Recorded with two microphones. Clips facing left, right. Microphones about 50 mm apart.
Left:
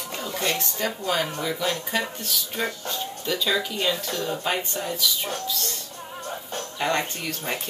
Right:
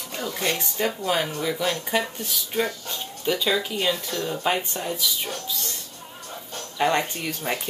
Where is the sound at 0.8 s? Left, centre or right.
Centre.